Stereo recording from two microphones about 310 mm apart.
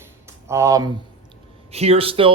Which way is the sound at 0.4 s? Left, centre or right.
Centre.